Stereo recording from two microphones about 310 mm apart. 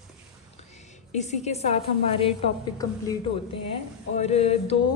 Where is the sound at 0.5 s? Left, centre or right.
Left.